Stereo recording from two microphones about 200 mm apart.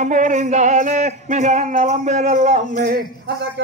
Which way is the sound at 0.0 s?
40° right (ahead or behind).